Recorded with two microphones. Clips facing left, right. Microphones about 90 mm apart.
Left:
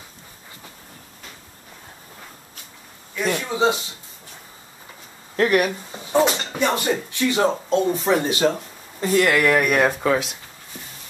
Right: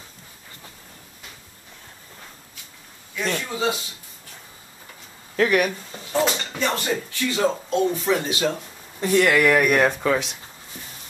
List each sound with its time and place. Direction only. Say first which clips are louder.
3.2 s speech: left 3 dB; 5° left (ahead or behind)
3.4 s speech: left 5 dB; 20° left (ahead or behind)
5.3 s speech: left 1 dB; centre (ahead or behind)
5.7 s speech: left 4 dB; 20° left (ahead or behind)
7.7 s speech: left 3 dB; 45° left (ahead or behind)
9.0 s speech: even; centre (ahead or behind)